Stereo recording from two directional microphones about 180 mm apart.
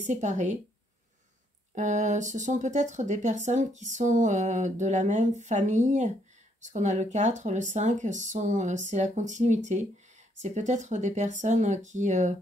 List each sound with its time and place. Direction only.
0.0 s speech: 40° right (ahead or behind)
1.8 s speech: 40° right (ahead or behind)